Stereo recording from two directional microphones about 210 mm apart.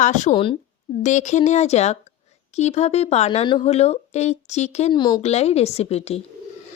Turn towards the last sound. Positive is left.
turn(degrees=30)  # may be behind; listen again after turning